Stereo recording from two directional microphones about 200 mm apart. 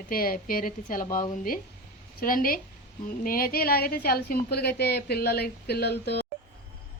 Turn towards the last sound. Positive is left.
turn(degrees=55)  # may be behind; listen again after turning